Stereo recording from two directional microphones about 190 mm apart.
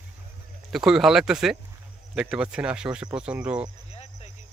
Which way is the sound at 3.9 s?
35° left (ahead or behind).